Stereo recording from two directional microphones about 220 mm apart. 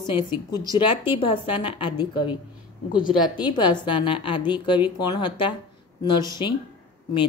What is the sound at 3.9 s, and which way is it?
Speech, 25° left (ahead or behind).